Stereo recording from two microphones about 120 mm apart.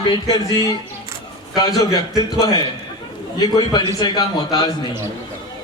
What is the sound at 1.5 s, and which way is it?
A man's voice, 30° left (ahead or behind).